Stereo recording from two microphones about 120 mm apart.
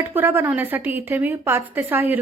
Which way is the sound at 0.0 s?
15° right (ahead or behind).